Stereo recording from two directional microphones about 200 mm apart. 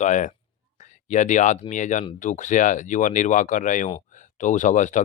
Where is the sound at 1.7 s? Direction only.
40° left (ahead or behind).